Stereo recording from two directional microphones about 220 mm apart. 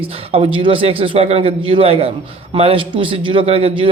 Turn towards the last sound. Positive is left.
turn(degrees=-25)  # may be behind; listen again after turning